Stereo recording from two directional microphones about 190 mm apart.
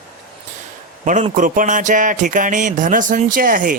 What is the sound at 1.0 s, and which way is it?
Speech, 40° right (ahead or behind).